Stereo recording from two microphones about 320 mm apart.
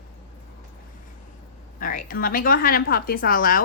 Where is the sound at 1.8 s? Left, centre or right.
Left.